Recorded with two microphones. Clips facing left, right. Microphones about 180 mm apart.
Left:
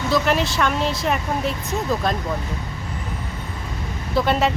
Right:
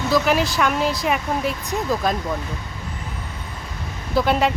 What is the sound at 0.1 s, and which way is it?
Speech, 5° right (ahead or behind).